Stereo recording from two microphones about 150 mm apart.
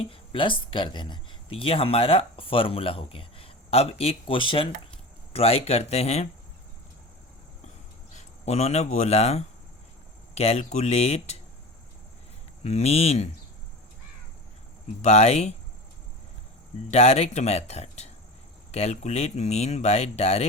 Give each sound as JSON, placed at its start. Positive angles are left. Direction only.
{"t": 0.0, "sound": "speech", "side_deg": 35}
{"t": 8.1, "sound": "speech", "side_deg": 45}
{"t": 12.6, "sound": "speech", "side_deg": 45}
{"t": 15.0, "sound": "speech", "side_deg": 45}
{"t": 16.9, "sound": "speech", "side_deg": 45}